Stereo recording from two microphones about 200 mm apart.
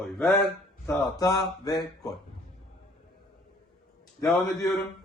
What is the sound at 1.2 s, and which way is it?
Speech, 15° left (ahead or behind).